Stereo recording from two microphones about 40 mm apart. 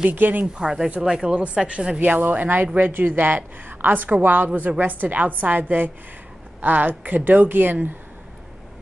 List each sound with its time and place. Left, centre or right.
0.2 s speech: right
0.6 s speech: centre
2.0 s speech: right